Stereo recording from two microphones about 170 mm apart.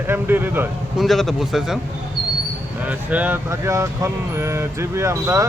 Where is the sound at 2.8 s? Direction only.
10° right (ahead or behind).